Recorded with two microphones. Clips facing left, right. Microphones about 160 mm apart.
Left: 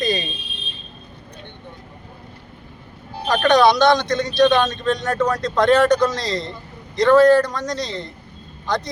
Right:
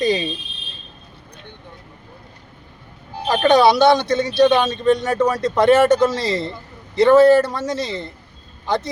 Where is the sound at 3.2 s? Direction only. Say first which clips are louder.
Right 2 dB; 20° right (ahead or behind).